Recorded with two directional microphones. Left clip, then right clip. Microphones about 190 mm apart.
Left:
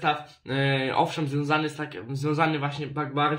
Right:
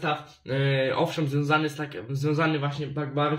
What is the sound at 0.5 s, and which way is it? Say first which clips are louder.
Speech: left 1 dB; 25° left (ahead or behind).